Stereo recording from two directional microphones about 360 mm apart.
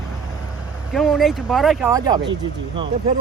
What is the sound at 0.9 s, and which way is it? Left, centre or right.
Speech, centre.